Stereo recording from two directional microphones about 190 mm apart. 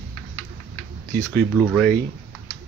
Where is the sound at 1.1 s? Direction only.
10° left (ahead or behind).